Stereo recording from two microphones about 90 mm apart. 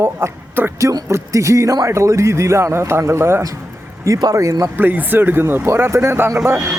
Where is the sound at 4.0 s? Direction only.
40° right (ahead or behind).